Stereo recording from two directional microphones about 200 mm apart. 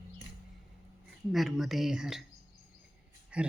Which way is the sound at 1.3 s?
Centre (ahead or behind).